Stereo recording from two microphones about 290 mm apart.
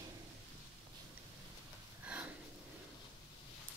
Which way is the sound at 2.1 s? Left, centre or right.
Centre.